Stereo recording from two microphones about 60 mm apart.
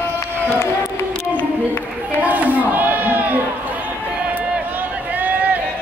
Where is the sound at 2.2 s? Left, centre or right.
Right.